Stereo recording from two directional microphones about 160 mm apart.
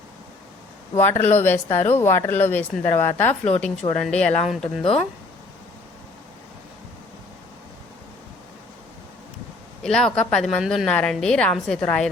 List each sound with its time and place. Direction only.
0.9 s a woman's voice: 10° left (ahead or behind)
4.6 s speech: 40° left (ahead or behind)
9.8 s a woman's voice: 5° left (ahead or behind)